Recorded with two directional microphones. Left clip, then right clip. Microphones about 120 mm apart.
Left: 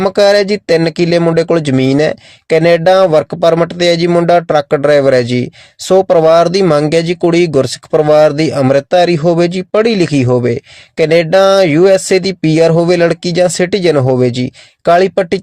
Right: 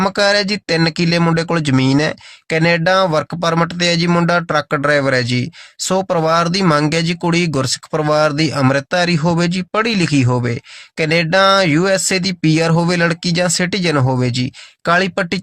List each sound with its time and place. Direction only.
0.0 s speech: 30° left (ahead or behind)